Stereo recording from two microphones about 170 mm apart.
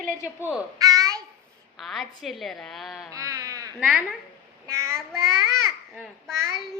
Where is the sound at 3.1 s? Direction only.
20° right (ahead or behind).